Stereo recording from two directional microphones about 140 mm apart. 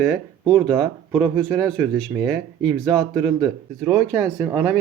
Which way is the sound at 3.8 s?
15° right (ahead or behind).